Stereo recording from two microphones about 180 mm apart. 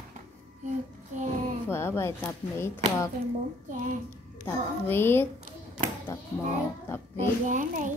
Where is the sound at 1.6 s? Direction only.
15° left (ahead or behind).